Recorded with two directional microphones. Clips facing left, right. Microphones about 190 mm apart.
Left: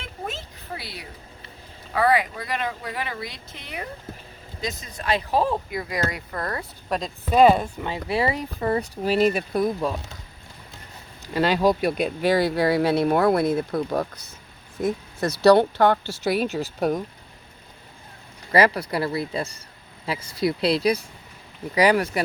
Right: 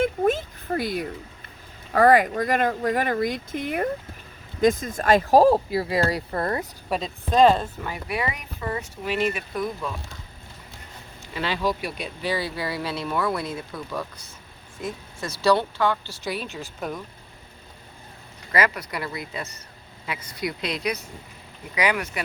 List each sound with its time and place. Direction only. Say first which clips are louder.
0.0 s a sound: right 13 dB; 50° right (ahead or behind)
1.9 s speech: right 4 dB; 45° right (ahead or behind); by 6.7 s 25° right (ahead or behind)
6.9 s speech: even; 5° right (ahead or behind)
7.3 s speech: left 1 dB; 10° left (ahead or behind)
7.9 s speech: left 6 dB; 25° left (ahead or behind)
11.3 s speech: left 6 dB; 40° left (ahead or behind)
11.8 s speech: left 9 dB; 55° left (ahead or behind)
12.4 s speech: left 8 dB; 70° left (ahead or behind)
12.6 s speech: left 9 dB; 55° left (ahead or behind)
15.3 s speech: left 6 dB; 65° left (ahead or behind); by 17.0 s 40° left (ahead or behind)
18.5 s speech: left 5 dB; 35° left (ahead or behind)